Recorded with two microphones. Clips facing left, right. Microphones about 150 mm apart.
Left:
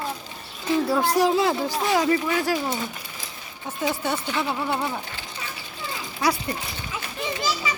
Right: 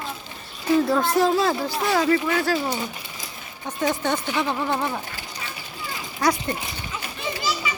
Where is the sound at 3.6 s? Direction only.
5° left (ahead or behind).